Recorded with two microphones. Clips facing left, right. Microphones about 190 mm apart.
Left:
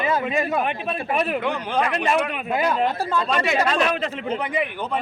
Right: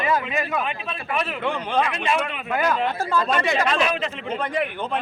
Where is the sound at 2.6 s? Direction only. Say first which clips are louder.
Even; 25° left (ahead or behind).